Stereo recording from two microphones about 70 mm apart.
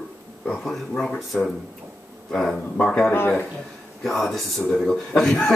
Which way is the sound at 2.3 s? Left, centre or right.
Centre.